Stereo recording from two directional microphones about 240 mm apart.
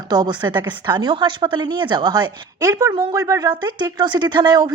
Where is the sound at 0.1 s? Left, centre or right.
Centre.